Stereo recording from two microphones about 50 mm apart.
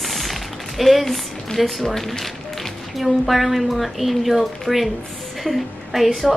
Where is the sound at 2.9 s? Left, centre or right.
Centre.